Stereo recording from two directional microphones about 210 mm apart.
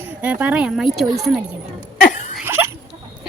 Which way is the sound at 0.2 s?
5° right (ahead or behind).